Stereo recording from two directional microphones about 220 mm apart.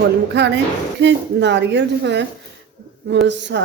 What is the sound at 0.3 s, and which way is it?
A woman's voice, 50° right (ahead or behind).